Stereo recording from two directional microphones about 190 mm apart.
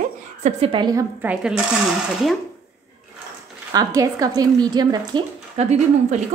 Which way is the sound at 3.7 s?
20° right (ahead or behind).